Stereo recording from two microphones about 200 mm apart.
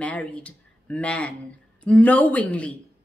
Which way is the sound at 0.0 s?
5° left (ahead or behind).